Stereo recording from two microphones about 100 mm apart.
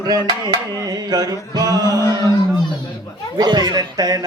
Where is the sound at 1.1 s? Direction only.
40° right (ahead or behind).